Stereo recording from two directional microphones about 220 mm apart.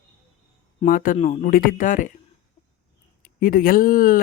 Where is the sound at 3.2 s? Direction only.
35° left (ahead or behind).